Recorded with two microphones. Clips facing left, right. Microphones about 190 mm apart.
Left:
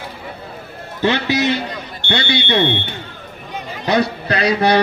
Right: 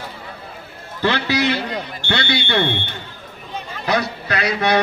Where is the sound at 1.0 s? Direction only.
20° left (ahead or behind).